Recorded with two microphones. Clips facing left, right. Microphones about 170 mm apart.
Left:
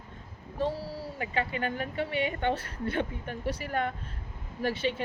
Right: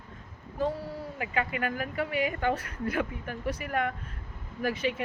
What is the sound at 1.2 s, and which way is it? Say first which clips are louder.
Speech: right 1 dB; 30° left (ahead or behind).